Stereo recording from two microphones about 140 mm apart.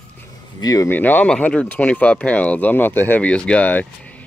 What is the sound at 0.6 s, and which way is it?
Speech, 25° left (ahead or behind).